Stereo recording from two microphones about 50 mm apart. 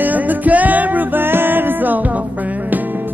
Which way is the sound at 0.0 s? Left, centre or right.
Right.